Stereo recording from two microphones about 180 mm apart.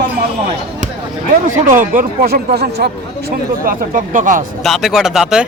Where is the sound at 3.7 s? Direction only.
45° right (ahead or behind).